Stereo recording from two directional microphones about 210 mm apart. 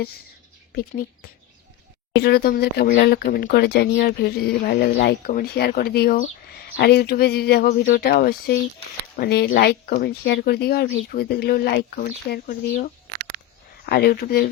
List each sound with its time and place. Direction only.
2.2 s speech: 50° left (ahead or behind)